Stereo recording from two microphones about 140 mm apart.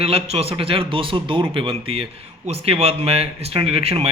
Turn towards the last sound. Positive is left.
turn(degrees=-45)  # may be behind; listen again after turning